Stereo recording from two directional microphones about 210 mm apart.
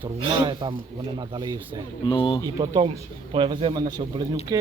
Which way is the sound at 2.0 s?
25° left (ahead or behind).